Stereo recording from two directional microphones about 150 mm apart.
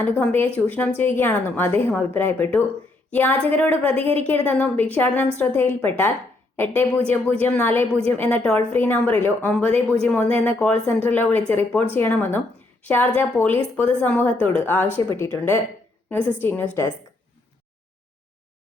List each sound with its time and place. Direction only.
0.0 s a woman's voice: 15° left (ahead or behind)